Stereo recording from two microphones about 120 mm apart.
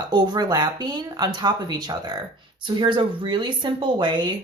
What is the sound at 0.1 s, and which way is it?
Speech, 35° right (ahead or behind).